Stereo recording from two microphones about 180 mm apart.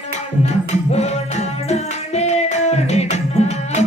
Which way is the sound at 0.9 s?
40° left (ahead or behind).